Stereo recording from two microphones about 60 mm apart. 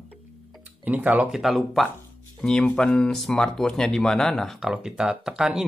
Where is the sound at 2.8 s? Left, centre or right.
Centre.